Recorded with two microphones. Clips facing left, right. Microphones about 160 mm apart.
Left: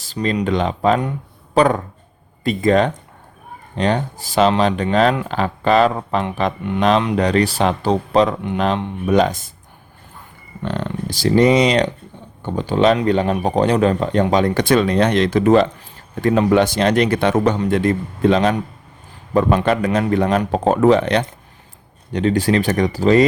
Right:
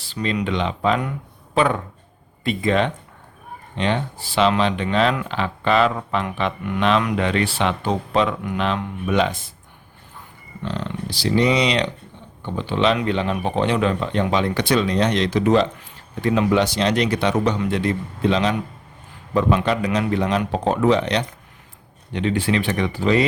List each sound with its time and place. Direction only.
0.0 s speech: 40° left (ahead or behind)
6.6 s speech: 25° left (ahead or behind); by 9.5 s 45° left (ahead or behind)
10.6 s speech: 55° left (ahead or behind)